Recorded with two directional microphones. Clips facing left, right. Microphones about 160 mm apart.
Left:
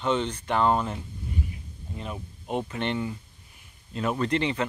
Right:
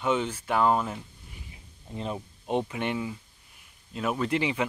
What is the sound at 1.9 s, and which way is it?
Speech, 25° right (ahead or behind).